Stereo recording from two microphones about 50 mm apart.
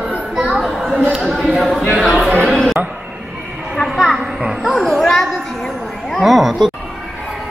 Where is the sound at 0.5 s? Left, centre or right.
Centre.